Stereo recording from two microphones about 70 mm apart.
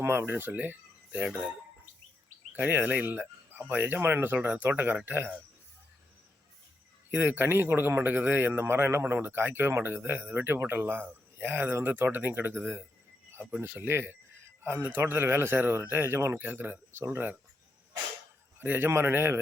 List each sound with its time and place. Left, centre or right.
0.0 s speech: right
2.5 s speech: right
7.1 s speech: right
16.4 s speech: right
18.6 s speech: right